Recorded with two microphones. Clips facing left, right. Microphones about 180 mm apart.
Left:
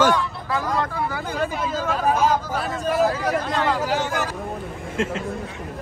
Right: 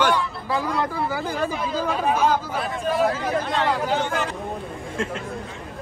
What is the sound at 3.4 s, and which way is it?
Speech, centre (ahead or behind).